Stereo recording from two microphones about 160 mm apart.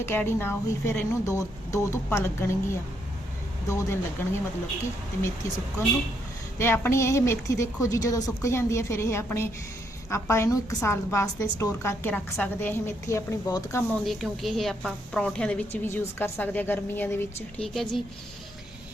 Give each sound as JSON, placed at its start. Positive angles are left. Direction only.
{"t": 0.0, "sound": "a woman's voice", "side_deg": 15}
{"t": 6.6, "sound": "a woman's voice", "side_deg": 15}
{"t": 14.0, "sound": "a woman's voice", "side_deg": 0}
{"t": 17.6, "sound": "a woman's voice", "side_deg": 0}